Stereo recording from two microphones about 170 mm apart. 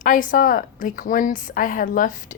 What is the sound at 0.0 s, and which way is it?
A woman's voice, 50° left (ahead or behind).